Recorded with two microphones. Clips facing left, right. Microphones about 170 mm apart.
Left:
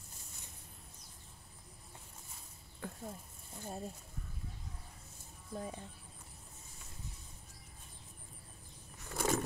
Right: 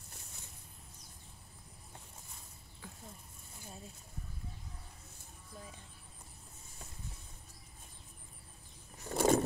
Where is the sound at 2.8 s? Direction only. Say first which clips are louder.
Left 8 dB; 55° left (ahead or behind).